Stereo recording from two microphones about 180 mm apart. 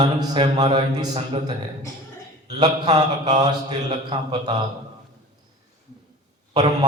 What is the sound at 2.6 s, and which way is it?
Mantra, 20° right (ahead or behind).